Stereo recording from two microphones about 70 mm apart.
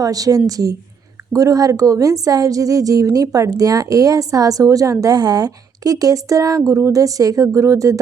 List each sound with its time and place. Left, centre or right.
0.0 s a woman's voice: right